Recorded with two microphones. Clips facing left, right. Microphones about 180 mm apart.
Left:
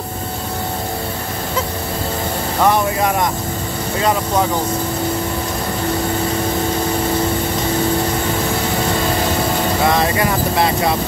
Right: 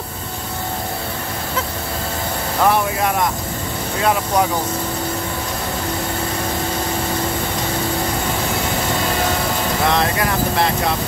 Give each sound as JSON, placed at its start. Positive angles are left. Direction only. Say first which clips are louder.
{"t": 2.6, "sound": "vehicle", "louder": "left 2 dB", "side_deg": 0}
{"t": 9.8, "sound": "speech", "louder": "left 2 dB", "side_deg": 0}